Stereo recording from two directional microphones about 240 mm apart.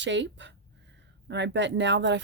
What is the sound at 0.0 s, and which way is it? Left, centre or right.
Speech, right.